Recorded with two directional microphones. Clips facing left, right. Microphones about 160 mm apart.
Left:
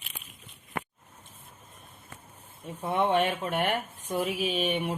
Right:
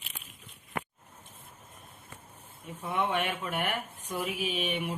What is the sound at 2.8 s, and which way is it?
Speech, 35° left (ahead or behind).